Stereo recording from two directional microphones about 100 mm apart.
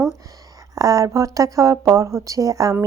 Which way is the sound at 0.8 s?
35° right (ahead or behind).